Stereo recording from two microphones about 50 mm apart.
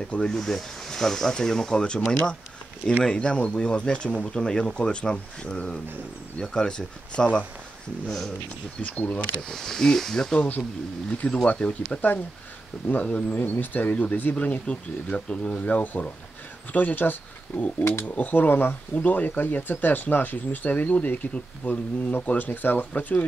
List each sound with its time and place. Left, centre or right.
0.2 s speech: centre
8.8 s speech: left
9.5 s speech: centre
10.3 s speech: left
14.7 s speech: left
19.0 s speech: left